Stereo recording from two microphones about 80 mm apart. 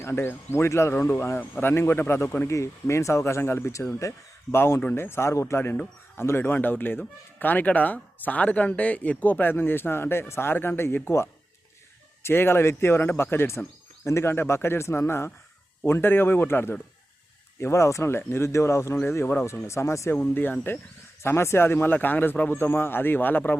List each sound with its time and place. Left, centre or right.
0.0 s speech: left
19.6 s speech: left
20.1 s speech: left